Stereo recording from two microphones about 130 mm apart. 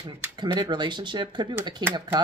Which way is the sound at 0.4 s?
35° right (ahead or behind).